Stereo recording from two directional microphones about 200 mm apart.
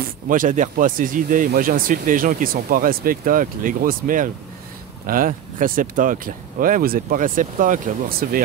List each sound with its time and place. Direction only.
0.0 s speech: 40° right (ahead or behind)